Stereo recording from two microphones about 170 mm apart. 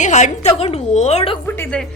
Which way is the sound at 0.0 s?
45° left (ahead or behind).